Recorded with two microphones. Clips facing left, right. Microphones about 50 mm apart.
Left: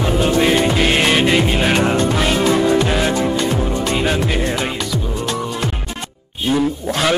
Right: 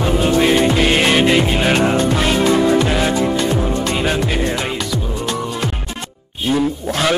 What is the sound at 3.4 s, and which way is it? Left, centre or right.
Music, centre.